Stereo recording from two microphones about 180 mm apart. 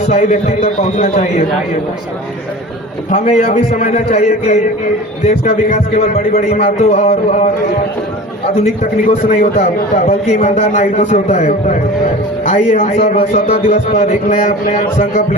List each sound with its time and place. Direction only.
0.0 s a man's voice: 40° left (ahead or behind)
3.1 s a man's voice: 40° left (ahead or behind)
8.6 s a man's voice: 40° left (ahead or behind)